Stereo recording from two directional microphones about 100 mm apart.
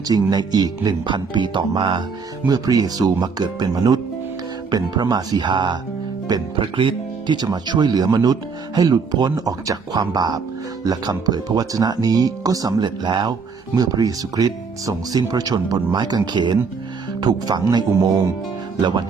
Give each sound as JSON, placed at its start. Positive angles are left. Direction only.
{"t": 0.1, "sound": "speech", "side_deg": -40}
{"t": 2.5, "sound": "speech", "side_deg": -40}
{"t": 6.7, "sound": "speech", "side_deg": -50}